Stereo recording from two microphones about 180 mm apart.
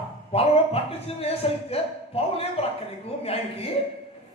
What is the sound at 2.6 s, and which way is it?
A man's voice, 35° left (ahead or behind).